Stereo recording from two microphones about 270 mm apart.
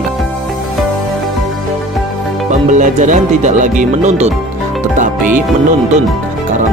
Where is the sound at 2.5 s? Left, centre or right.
Right.